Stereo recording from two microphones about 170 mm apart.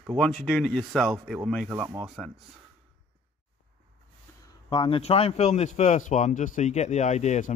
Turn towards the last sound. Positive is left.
turn(degrees=45)  # may be behind; listen again after turning